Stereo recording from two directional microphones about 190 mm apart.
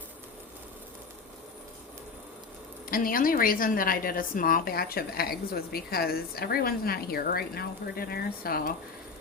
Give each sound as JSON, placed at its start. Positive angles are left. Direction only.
{"t": 2.9, "sound": "a woman's voice", "side_deg": 50}